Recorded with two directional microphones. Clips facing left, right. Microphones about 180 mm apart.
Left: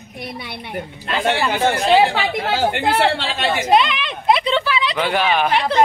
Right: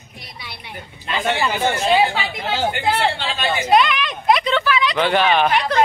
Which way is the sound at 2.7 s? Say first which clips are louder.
Left 2 dB; 70° left (ahead or behind).